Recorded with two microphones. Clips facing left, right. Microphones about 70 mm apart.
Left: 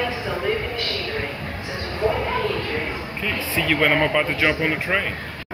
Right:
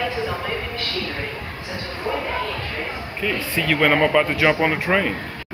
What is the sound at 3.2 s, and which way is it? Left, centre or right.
Speech, centre.